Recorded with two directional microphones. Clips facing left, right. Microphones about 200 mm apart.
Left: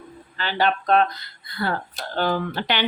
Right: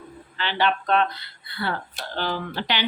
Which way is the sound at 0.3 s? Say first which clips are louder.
Left 1 dB; 40° left (ahead or behind).